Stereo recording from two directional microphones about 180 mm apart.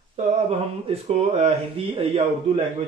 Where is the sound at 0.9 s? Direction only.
35° right (ahead or behind).